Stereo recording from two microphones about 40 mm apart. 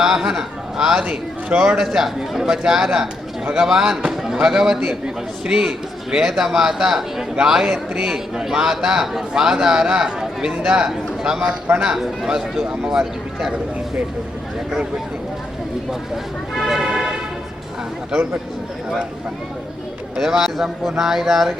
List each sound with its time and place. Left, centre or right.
0.0 s a man's voice: centre
1.8 s a man's voice: centre
16.6 s speech: centre
20.1 s a man's voice: centre